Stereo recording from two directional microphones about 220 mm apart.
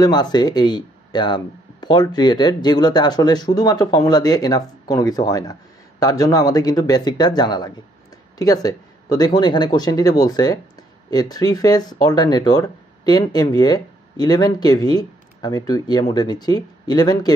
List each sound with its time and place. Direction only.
0.0 s speech: 20° left (ahead or behind)